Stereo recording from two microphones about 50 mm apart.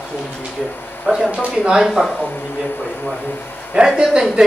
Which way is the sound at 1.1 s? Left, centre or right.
Centre.